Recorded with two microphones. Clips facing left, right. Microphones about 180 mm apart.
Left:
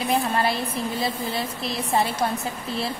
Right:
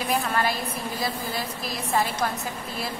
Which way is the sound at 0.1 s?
25° left (ahead or behind).